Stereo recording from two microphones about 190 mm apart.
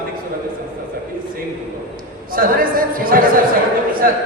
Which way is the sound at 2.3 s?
50° right (ahead or behind).